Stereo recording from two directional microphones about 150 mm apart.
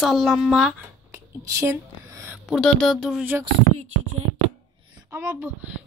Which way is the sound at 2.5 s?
Centre (ahead or behind).